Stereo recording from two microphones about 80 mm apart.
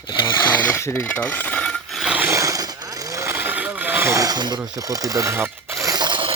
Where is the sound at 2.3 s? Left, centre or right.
Right.